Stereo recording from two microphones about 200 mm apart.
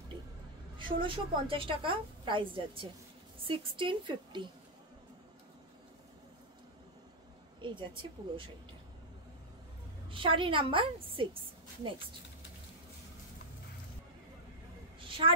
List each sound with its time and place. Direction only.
0.7 s a woman's voice: 25° right (ahead or behind)
7.6 s a woman's voice: 25° right (ahead or behind)
10.0 s a woman's voice: 25° right (ahead or behind)
15.0 s a sound: 25° right (ahead or behind)